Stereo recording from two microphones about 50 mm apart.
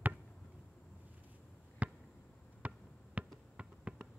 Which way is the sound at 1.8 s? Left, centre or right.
Right.